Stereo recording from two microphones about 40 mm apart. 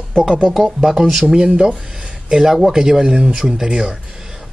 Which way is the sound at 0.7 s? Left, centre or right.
Centre.